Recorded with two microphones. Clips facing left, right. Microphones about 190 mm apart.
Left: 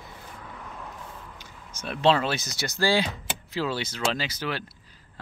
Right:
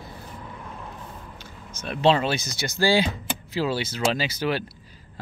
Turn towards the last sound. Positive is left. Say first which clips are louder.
# right 5 dB
turn(degrees=-10)  # may be behind; listen again after turning